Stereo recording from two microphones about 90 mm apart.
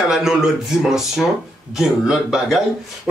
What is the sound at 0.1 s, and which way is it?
Speech, 5° right (ahead or behind).